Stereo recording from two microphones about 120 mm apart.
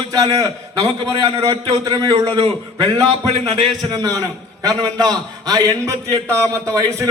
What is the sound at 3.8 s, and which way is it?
A man's voice, 30° right (ahead or behind).